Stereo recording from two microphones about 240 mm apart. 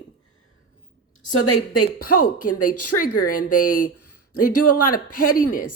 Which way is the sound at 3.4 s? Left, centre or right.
Left.